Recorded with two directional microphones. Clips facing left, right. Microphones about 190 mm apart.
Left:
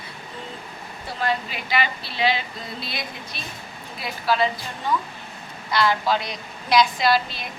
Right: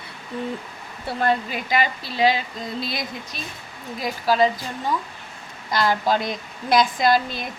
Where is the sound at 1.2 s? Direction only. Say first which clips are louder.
Right 3 dB; 50° right (ahead or behind).